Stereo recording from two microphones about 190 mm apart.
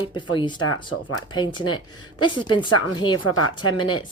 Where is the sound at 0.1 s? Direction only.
25° left (ahead or behind).